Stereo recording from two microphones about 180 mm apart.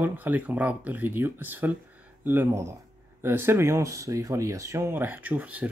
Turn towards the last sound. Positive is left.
turn(degrees=-10)  # may be behind; listen again after turning